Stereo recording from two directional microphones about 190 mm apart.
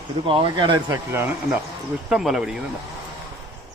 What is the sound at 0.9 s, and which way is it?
Speech, 10° right (ahead or behind).